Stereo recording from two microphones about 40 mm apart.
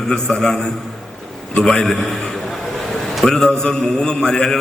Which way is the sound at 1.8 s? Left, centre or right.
Centre.